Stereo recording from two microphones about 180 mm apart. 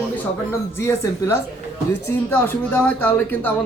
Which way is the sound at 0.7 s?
15° left (ahead or behind).